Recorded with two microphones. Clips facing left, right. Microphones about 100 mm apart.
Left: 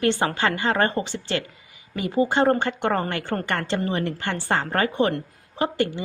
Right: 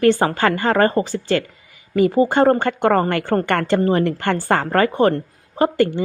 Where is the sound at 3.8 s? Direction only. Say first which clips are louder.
Right 8 dB; 45° right (ahead or behind).